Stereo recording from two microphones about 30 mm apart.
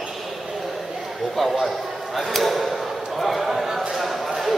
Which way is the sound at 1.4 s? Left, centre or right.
Centre.